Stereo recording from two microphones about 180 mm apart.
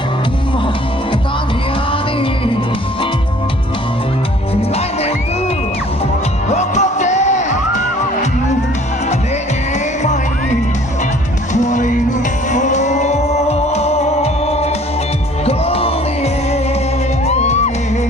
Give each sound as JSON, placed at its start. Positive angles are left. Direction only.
{"t": 6.5, "sound": "music", "side_deg": 40}
{"t": 10.0, "sound": "music", "side_deg": 40}